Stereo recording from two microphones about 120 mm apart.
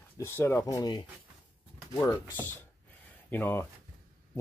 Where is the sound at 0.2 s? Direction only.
20° left (ahead or behind).